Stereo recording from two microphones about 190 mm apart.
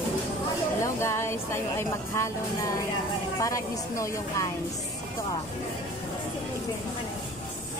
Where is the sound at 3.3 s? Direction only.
15° left (ahead or behind).